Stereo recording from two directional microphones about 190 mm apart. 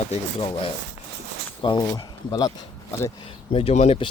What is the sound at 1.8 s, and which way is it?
Speech, 20° left (ahead or behind).